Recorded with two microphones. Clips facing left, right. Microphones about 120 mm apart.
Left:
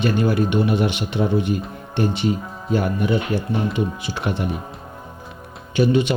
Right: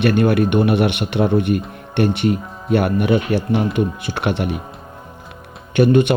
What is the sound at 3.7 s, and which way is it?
Speech, 55° right (ahead or behind).